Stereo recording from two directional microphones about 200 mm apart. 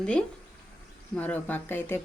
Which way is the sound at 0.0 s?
5° left (ahead or behind).